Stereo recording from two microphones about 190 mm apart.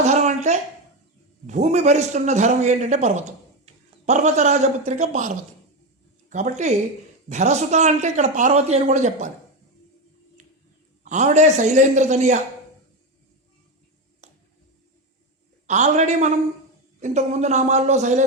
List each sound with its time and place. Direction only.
0.0 s a sound: 35° right (ahead or behind)
1.5 s a man's voice: 35° right (ahead or behind)
6.3 s a man's voice: 40° right (ahead or behind)
10.4 s a sound: 40° right (ahead or behind)
11.0 s a man's voice: 40° right (ahead or behind)
14.2 s music: 40° right (ahead or behind)
15.6 s a man's voice: 40° right (ahead or behind)